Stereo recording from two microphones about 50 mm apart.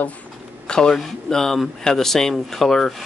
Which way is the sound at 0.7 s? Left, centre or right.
Centre.